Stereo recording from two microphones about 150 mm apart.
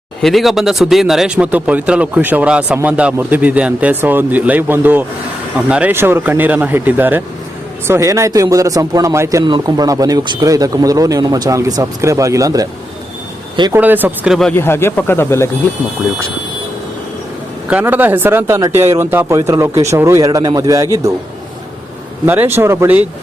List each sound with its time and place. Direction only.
0.2 s speech: centre (ahead or behind); by 12.6 s 25° right (ahead or behind)
13.7 s speech: 10° right (ahead or behind)
14.5 s speech: 15° left (ahead or behind)
17.7 s speech: 10° right (ahead or behind)
22.3 s speech: 15° right (ahead or behind)